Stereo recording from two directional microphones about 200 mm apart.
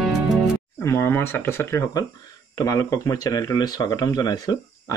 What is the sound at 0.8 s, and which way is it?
Speech, 15° left (ahead or behind).